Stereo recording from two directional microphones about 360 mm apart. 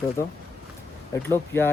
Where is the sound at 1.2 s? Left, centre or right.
Centre.